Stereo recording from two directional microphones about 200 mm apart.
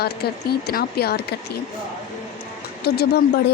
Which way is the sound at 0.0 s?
50° left (ahead or behind).